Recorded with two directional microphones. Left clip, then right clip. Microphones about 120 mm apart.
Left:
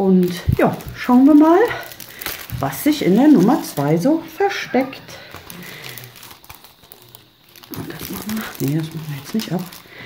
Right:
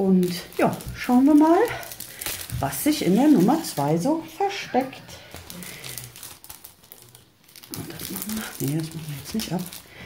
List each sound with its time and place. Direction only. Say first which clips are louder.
0.3 s speech: left 5 dB; 20° left (ahead or behind); by 4.8 s 35° left (ahead or behind)
7.7 s a sound: left 5 dB; 25° left (ahead or behind)
8.4 s crumpling: left 6 dB; 15° left (ahead or behind)
9.3 s speech: left 5 dB; 20° left (ahead or behind)